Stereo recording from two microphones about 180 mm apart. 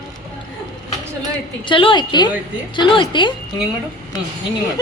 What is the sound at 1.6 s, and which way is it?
A woman's voice, 25° left (ahead or behind).